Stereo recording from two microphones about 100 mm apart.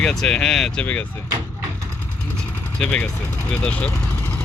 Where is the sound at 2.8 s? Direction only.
5° left (ahead or behind).